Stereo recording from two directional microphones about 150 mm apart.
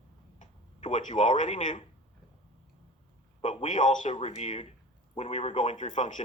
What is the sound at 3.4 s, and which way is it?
Speech, 50° left (ahead or behind).